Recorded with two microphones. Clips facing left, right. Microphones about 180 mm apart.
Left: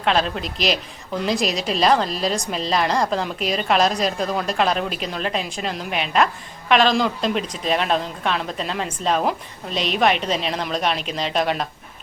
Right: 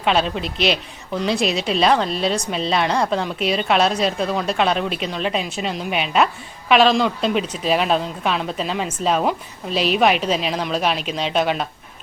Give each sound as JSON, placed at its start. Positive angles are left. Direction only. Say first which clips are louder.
{"t": 0.0, "sound": "a woman's voice", "louder": "right 1 dB", "side_deg": 0}